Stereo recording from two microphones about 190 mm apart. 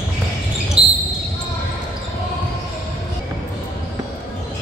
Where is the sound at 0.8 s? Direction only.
30° right (ahead or behind).